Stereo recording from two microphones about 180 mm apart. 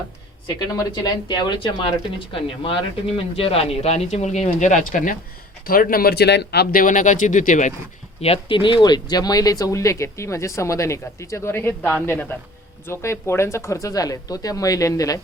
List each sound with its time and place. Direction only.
0.4 s speech: 20° left (ahead or behind); by 7.7 s 45° left (ahead or behind)
8.2 s speech: 30° left (ahead or behind)